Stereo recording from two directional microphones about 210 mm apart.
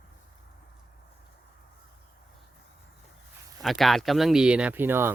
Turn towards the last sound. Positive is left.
turn(degrees=-10)  # may be behind; listen again after turning